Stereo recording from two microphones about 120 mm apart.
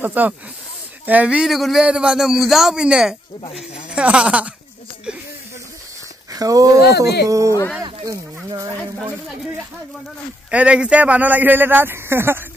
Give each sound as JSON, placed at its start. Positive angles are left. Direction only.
{"t": 0.0, "sound": "speech", "side_deg": -15}
{"t": 6.3, "sound": "speech", "side_deg": -30}
{"t": 10.5, "sound": "speech", "side_deg": -10}